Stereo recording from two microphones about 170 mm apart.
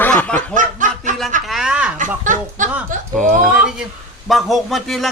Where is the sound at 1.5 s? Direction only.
5° right (ahead or behind).